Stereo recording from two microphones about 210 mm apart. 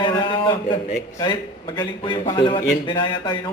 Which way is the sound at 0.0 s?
20° left (ahead or behind).